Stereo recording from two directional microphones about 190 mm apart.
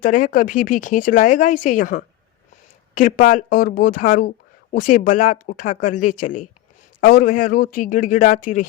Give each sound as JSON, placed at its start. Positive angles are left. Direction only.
{"t": 0.0, "sound": "speech", "side_deg": 45}